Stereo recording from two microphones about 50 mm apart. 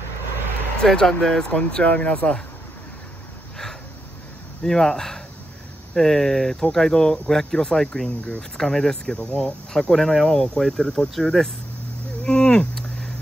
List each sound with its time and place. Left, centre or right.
0.8 s speech: centre; by 2.3 s left
4.6 s speech: centre
12.3 s a sound: centre